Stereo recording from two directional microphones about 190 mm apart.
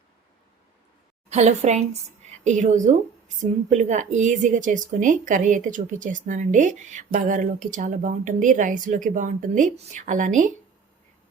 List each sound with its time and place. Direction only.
1.3 s a woman's voice: 35° right (ahead or behind)